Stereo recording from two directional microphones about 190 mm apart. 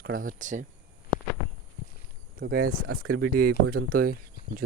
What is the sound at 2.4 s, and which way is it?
Speech, 50° right (ahead or behind).